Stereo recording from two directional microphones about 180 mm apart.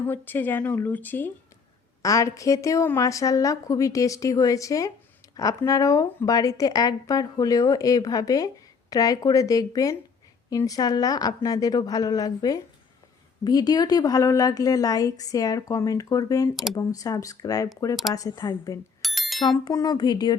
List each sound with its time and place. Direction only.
0.0 s a woman's voice: 10° left (ahead or behind)
19.0 s bicycle bell: centre (ahead or behind)
19.4 s speech: 20° left (ahead or behind)